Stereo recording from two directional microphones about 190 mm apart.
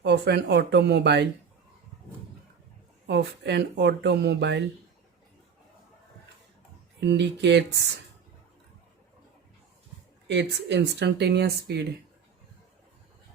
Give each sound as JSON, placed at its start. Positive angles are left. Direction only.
{"t": 0.0, "sound": "speech", "side_deg": -65}
{"t": 3.1, "sound": "speech", "side_deg": -65}
{"t": 7.0, "sound": "speech", "side_deg": -65}
{"t": 10.2, "sound": "speech", "side_deg": -65}